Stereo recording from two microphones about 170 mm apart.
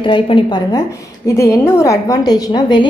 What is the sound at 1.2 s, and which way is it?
A woman's voice, 15° left (ahead or behind).